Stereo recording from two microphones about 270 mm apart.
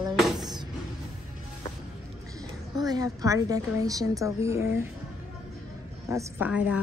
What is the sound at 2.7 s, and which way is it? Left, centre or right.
Speech, centre.